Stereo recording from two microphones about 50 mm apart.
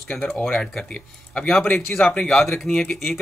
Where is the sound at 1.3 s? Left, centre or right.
Centre.